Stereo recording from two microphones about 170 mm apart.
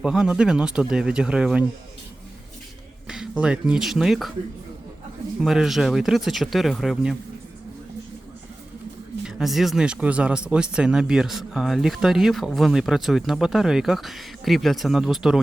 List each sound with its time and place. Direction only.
0.0 s speech: 5° right (ahead or behind)
3.1 s speech: 5° right (ahead or behind)
5.4 s speech: centre (ahead or behind)
9.2 s speech: centre (ahead or behind)